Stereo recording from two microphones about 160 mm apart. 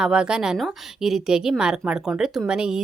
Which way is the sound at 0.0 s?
5° right (ahead or behind).